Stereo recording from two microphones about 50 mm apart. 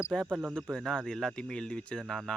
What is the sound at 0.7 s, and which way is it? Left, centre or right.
Speech, centre.